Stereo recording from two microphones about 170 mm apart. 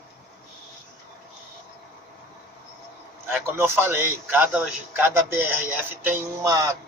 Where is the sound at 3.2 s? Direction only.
15° right (ahead or behind).